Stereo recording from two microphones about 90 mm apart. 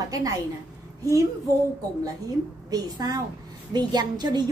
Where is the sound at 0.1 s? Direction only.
40° right (ahead or behind).